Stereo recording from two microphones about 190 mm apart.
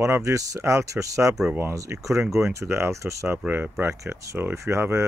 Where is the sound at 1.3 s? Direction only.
5° right (ahead or behind).